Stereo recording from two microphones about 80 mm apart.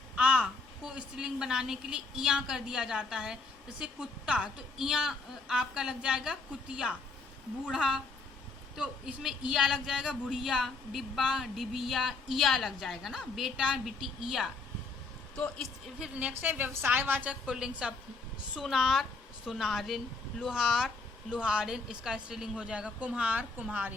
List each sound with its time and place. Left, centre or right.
0.2 s a sound: centre
0.9 s a woman's voice: centre
15.4 s speech: centre
16.0 s a woman's voice: centre
17.4 s a woman's voice: centre